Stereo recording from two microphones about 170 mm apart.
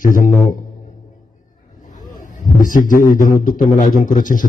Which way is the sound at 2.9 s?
50° left (ahead or behind).